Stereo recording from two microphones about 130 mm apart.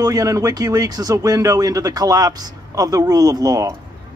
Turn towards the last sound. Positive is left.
turn(degrees=-25)  # may be behind; listen again after turning